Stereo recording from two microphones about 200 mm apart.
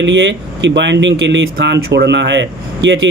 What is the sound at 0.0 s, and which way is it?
Speech, 65° right (ahead or behind).